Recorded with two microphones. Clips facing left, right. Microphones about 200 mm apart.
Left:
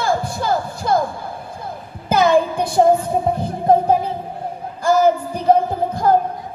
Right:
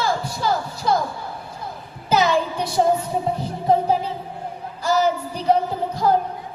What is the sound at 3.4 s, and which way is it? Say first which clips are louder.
Music: left 3 dB; 50° left (ahead or behind).